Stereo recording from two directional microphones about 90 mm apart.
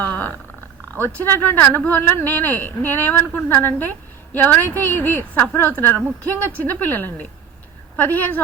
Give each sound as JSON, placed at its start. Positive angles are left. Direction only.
{"t": 0.0, "sound": "purr", "side_deg": 20}
{"t": 1.2, "sound": "a woman's voice", "side_deg": 25}